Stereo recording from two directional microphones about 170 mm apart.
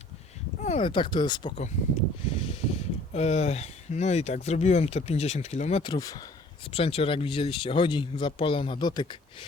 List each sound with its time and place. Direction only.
0.8 s speech: 30° left (ahead or behind)
5.8 s speech: 25° left (ahead or behind)
6.7 s speech: 35° left (ahead or behind)